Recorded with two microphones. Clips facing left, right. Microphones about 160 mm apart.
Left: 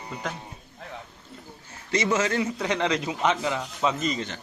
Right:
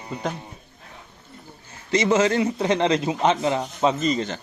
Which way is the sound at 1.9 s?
25° right (ahead or behind).